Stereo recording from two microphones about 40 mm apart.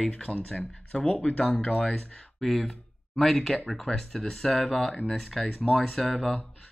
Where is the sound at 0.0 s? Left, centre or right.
Left.